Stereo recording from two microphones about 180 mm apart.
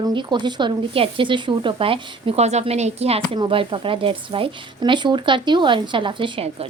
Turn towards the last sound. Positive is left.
turn(degrees=-30)  # may be behind; listen again after turning